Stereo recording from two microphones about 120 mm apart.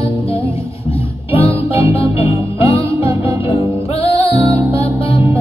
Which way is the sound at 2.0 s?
55° left (ahead or behind).